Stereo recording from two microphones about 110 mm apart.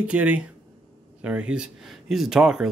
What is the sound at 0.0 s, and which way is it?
Speech, 10° right (ahead or behind).